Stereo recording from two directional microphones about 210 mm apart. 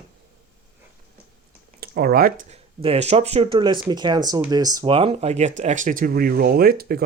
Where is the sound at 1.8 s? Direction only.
45° right (ahead or behind).